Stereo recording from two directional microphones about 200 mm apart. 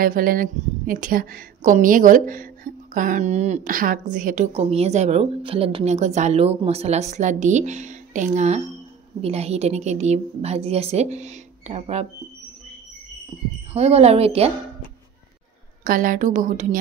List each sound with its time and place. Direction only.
0.0 s a woman's voice: 45° right (ahead or behind)
13.7 s a woman's voice: 30° right (ahead or behind)
15.8 s a woman's voice: 45° right (ahead or behind)